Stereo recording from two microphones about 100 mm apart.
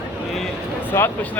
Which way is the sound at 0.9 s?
25° left (ahead or behind).